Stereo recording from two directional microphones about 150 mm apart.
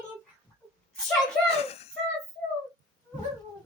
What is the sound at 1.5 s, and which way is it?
Speech, 45° left (ahead or behind).